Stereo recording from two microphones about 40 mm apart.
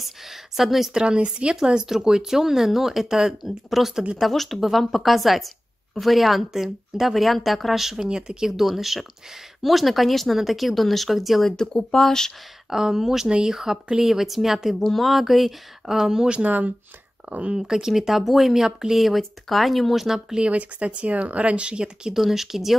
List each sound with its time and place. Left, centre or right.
0.0 s a sound: centre
0.9 s speech: right
1.6 s speech: centre
8.1 s speech: centre
8.5 s speech: centre
11.4 s speech: centre
12.6 s speech: centre
13.3 s speech: centre
15.9 s speech: centre
16.4 s speech: right
17.3 s speech: right
17.6 s speech: centre
20.3 s speech: right
22.1 s speech: centre